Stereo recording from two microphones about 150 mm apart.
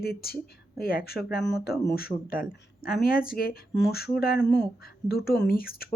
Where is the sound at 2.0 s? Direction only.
80° left.